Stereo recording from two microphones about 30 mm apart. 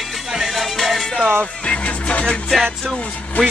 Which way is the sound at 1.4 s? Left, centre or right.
Left.